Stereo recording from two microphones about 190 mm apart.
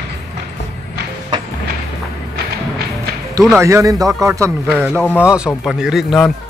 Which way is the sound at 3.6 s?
15° right (ahead or behind).